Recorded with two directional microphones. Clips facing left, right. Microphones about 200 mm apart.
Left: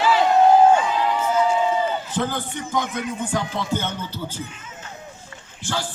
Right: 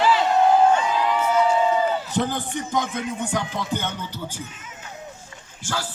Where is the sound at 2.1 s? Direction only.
15° right (ahead or behind).